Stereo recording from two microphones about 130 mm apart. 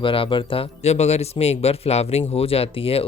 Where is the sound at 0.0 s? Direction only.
40° left (ahead or behind).